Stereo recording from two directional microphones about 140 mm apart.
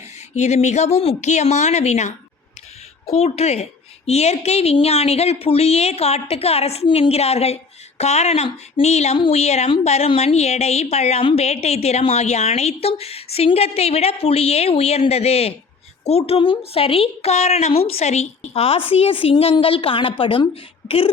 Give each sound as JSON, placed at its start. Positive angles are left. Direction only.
{"t": 0.3, "sound": "speech", "side_deg": 55}